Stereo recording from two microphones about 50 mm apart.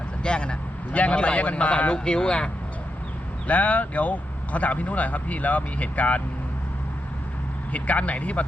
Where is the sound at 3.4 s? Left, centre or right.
Left.